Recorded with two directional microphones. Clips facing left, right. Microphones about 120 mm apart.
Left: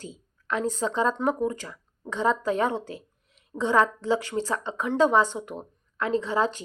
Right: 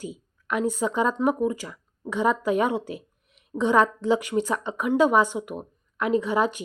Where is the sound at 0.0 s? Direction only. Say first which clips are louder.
Right 5 dB; 15° right (ahead or behind).